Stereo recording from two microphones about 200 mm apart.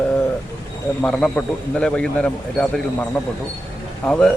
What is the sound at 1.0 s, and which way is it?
Speech, 5° left (ahead or behind).